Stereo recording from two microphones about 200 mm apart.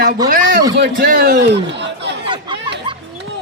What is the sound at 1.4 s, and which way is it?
Speech, 60° right (ahead or behind).